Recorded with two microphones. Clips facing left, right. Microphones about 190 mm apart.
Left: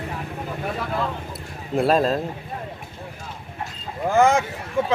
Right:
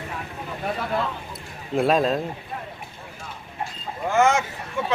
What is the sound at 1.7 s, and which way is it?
Speech, centre (ahead or behind).